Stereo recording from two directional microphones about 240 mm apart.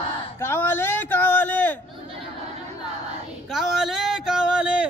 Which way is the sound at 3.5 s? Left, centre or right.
Centre.